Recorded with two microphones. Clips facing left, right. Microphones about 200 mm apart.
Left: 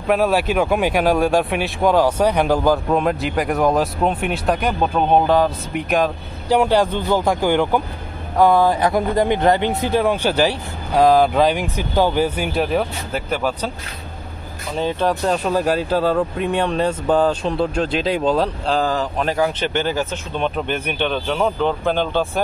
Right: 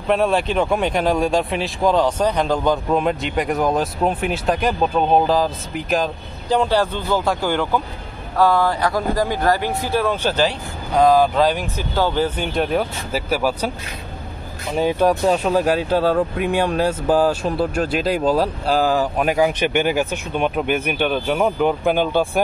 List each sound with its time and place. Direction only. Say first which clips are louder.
0.1 s speech: left 1 dB; 5° left (ahead or behind)
6.5 s speech: left 2 dB; 10° left (ahead or behind); by 13.7 s 10° right (ahead or behind)
14.8 s speech: right 3 dB; 10° right (ahead or behind)